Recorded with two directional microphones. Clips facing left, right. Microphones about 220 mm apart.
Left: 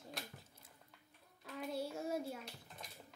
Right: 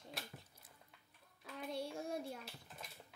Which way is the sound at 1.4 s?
Centre (ahead or behind).